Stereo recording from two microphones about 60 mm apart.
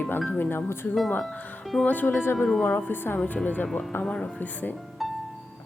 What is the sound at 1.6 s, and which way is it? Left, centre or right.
Music, centre.